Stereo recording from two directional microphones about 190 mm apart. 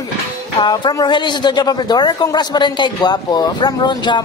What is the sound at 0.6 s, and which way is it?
Speech, 25° left (ahead or behind).